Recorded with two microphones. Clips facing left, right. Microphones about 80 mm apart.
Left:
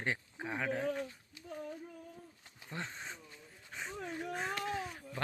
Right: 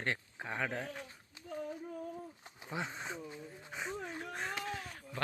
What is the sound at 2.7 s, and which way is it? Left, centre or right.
Dog, centre.